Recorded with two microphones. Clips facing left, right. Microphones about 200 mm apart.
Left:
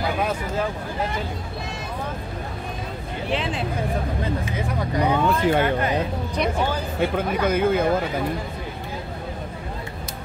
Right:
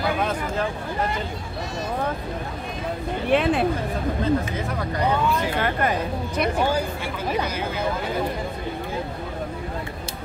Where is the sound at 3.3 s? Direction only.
55° right (ahead or behind).